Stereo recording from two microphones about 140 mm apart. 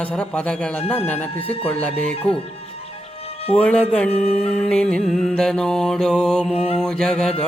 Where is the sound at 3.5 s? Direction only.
10° left (ahead or behind).